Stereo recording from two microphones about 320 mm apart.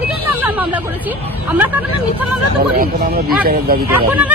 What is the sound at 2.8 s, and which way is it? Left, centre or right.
Speech, right.